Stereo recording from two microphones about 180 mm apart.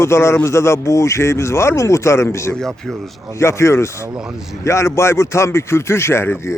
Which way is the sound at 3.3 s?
15° left (ahead or behind).